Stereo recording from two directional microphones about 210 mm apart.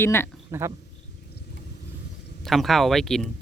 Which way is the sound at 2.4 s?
Centre (ahead or behind).